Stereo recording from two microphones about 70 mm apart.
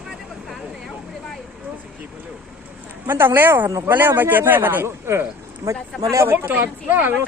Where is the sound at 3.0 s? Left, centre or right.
Right.